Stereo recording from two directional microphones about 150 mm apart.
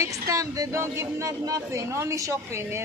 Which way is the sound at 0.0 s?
20° right (ahead or behind).